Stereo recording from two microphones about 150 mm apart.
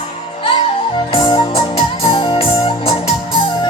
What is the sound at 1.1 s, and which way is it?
Music, 35° left (ahead or behind).